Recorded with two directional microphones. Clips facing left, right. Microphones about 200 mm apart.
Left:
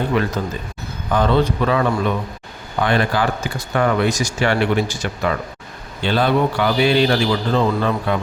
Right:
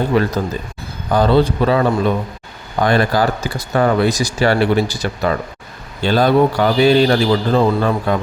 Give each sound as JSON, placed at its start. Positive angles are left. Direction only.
{"t": 0.1, "sound": "speech", "side_deg": -35}